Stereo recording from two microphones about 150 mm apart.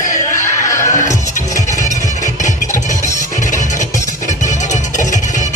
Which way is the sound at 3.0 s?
55° left (ahead or behind).